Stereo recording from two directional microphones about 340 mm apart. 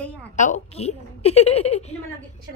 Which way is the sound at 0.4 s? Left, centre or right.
Centre.